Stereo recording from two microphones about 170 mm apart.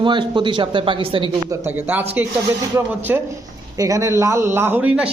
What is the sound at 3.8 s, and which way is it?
A man's voice, 20° right (ahead or behind).